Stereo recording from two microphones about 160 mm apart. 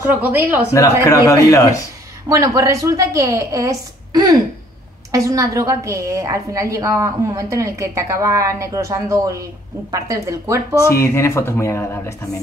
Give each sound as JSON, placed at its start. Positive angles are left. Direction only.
{"t": 0.0, "sound": "speech", "side_deg": -10}
{"t": 0.7, "sound": "a man's voice", "side_deg": 20}
{"t": 2.2, "sound": "a woman's voice", "side_deg": -20}
{"t": 10.9, "sound": "speech", "side_deg": 15}